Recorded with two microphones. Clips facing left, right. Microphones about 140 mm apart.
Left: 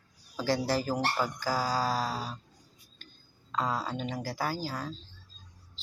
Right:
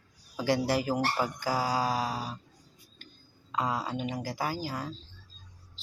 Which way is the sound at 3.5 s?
10° right (ahead or behind).